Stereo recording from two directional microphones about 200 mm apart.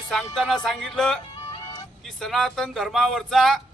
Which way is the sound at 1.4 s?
25° left (ahead or behind).